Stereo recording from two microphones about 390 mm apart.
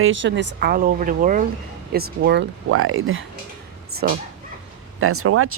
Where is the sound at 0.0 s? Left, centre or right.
Right.